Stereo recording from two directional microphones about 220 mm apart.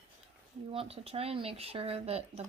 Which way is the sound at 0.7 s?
25° right (ahead or behind).